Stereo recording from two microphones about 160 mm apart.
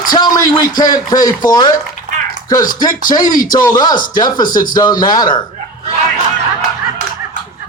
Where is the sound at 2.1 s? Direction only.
55° right (ahead or behind).